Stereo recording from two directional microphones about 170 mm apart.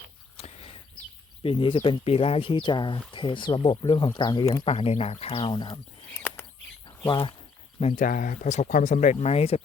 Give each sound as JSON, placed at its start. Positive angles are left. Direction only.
{"t": 0.3, "sound": "a sound", "side_deg": 35}
{"t": 1.4, "sound": "speech", "side_deg": 30}
{"t": 4.7, "sound": "speech", "side_deg": 35}
{"t": 6.1, "sound": "bird", "side_deg": 15}
{"t": 7.1, "sound": "speech", "side_deg": 30}
{"t": 8.0, "sound": "speech", "side_deg": 55}